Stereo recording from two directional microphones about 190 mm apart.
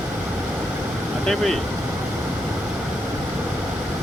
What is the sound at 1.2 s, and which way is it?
Speech, centre (ahead or behind).